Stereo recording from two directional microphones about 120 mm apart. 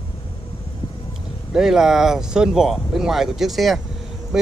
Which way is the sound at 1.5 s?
5° right (ahead or behind).